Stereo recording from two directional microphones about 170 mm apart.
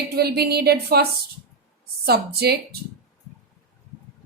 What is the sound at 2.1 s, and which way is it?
Speech, 70° right (ahead or behind).